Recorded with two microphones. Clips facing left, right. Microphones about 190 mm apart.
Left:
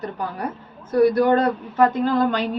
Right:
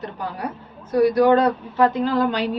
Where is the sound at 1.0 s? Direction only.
55° left (ahead or behind).